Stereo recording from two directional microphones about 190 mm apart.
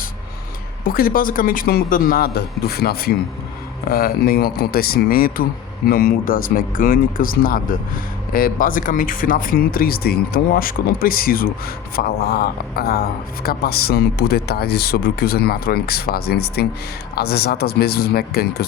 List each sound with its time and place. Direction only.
0.9 s speech: 50° left (ahead or behind)